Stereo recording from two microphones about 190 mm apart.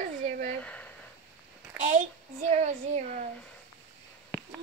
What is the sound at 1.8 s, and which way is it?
A child's voice, 40° right (ahead or behind).